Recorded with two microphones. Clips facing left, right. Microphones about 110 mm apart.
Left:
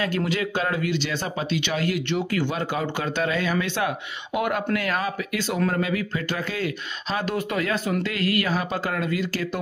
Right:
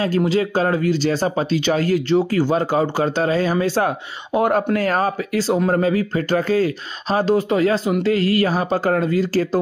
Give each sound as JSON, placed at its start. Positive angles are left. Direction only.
{"t": 0.0, "sound": "speech", "side_deg": -30}